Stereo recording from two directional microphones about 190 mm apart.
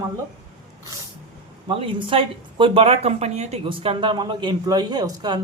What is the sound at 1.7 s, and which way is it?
Speech, 30° right (ahead or behind).